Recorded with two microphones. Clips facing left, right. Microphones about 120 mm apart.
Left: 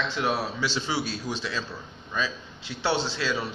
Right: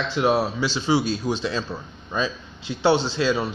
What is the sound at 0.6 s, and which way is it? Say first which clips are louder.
A man's voice: right 7 dB; 15° right (ahead or behind).